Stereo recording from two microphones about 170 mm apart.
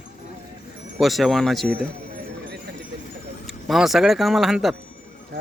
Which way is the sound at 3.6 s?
Centre (ahead or behind).